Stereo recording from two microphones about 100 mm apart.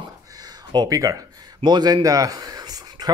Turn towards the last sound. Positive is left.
turn(degrees=-40)  # may be behind; listen again after turning